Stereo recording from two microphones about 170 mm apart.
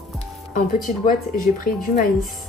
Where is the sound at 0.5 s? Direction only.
50° left (ahead or behind).